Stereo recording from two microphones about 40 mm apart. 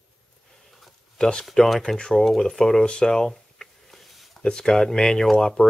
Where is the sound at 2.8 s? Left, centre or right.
Left.